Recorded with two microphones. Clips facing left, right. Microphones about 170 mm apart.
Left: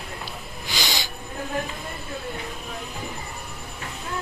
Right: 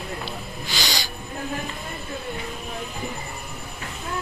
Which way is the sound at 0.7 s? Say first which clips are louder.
Even; 20° left (ahead or behind).